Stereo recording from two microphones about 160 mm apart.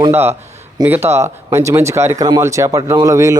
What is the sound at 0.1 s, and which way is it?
Speech, 15° right (ahead or behind).